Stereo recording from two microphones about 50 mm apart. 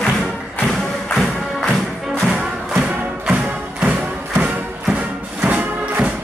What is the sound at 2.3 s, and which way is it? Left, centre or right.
Music, centre.